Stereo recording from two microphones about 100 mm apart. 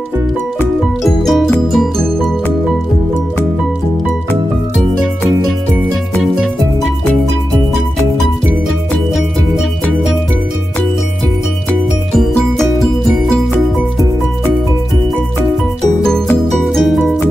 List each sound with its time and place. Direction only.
1.0 s music: centre (ahead or behind)
12.2 s music: centre (ahead or behind)
16.7 s music: centre (ahead or behind)